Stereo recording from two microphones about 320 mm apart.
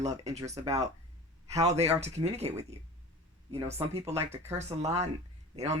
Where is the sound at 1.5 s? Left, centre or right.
Centre.